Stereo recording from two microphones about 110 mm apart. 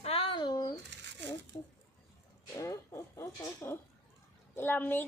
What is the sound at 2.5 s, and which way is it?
A child's voice, 25° left (ahead or behind).